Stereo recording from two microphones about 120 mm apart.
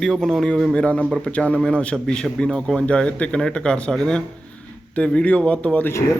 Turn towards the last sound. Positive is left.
turn(degrees=10)  # may be behind; listen again after turning